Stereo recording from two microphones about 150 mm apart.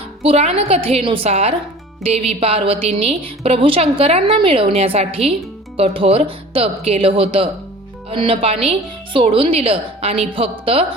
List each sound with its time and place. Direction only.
0.2 s a woman's voice: 45° right (ahead or behind)